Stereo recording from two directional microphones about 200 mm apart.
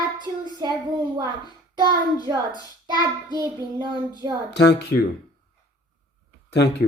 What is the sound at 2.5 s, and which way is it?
Child singing, 20° left (ahead or behind).